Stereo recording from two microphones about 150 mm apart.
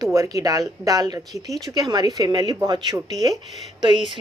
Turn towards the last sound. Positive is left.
turn(degrees=-30)  # may be behind; listen again after turning